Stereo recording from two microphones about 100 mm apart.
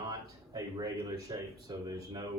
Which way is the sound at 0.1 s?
45° right (ahead or behind).